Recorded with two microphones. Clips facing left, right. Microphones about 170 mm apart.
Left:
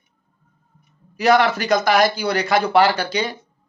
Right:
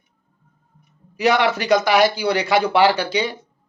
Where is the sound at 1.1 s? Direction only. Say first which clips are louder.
Left 2 dB; 40° left (ahead or behind).